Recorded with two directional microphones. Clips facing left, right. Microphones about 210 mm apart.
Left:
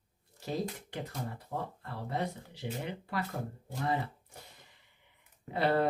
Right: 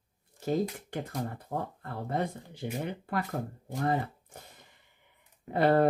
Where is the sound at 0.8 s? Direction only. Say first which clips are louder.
Right 4 dB; 50° right (ahead or behind).